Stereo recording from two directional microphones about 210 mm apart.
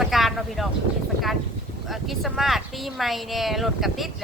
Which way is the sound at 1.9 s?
Centre (ahead or behind).